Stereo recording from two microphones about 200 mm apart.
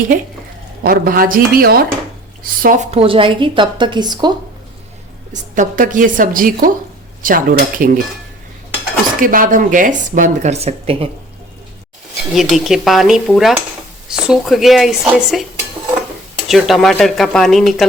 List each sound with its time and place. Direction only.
0.8 s a woman's voice: 45° right (ahead or behind)
2.9 s a woman's voice: 25° right (ahead or behind)
5.3 s a woman's voice: 40° right (ahead or behind)
9.2 s speech: 45° right (ahead or behind)
12.3 s speech: centre (ahead or behind)
16.5 s speech: centre (ahead or behind)